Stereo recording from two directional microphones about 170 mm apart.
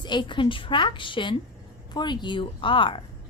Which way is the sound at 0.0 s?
25° left (ahead or behind).